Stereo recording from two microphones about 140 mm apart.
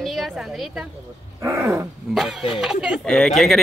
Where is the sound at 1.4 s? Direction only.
20° right (ahead or behind).